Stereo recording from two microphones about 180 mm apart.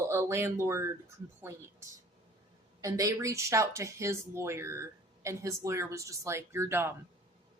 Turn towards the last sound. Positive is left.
turn(degrees=-15)  # may be behind; listen again after turning